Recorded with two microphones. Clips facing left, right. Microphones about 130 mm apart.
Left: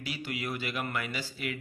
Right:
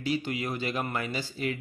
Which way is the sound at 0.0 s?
30° right (ahead or behind).